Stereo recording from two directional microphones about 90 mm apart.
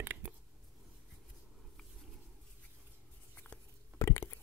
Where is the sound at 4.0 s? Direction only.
30° left (ahead or behind).